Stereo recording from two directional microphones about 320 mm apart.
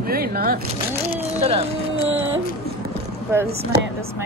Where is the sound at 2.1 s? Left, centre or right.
Right.